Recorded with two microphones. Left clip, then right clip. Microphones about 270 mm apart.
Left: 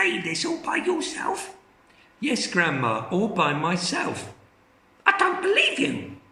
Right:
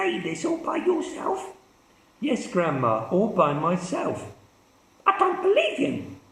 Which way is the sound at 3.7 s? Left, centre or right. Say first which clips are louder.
Left 1 dB; left.